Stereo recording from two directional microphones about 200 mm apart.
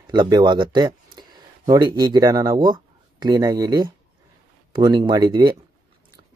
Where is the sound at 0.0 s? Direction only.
20° right (ahead or behind).